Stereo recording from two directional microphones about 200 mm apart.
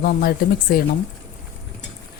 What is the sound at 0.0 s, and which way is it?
Speech, 45° left (ahead or behind).